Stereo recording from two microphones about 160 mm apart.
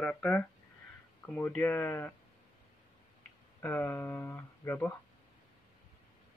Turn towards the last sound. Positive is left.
turn(degrees=15)  # may be behind; listen again after turning